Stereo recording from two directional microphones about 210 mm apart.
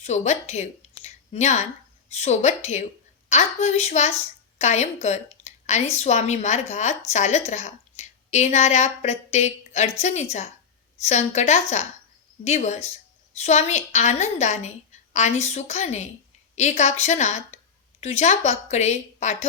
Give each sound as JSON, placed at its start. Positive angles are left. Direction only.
{"t": 0.0, "sound": "a woman's voice", "side_deg": 30}